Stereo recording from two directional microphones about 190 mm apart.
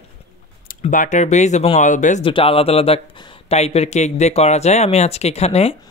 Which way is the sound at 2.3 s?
30° left (ahead or behind).